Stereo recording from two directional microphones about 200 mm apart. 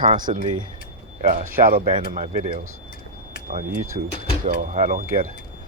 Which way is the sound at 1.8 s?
25° right (ahead or behind).